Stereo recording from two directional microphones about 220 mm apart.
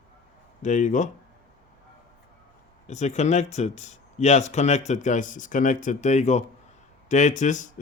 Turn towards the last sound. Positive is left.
turn(degrees=35)  # may be behind; listen again after turning